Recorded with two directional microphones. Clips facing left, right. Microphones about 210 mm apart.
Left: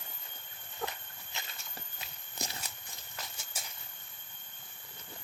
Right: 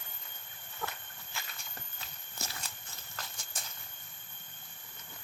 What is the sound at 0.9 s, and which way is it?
Walk, 20° left (ahead or behind).